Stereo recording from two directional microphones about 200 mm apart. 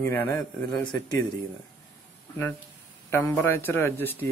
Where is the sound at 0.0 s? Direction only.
10° left (ahead or behind).